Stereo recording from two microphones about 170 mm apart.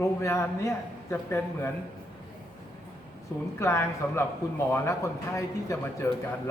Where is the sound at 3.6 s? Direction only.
15° left (ahead or behind).